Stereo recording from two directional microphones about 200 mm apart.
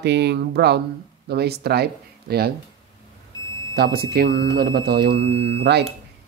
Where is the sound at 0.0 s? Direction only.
60° right (ahead or behind).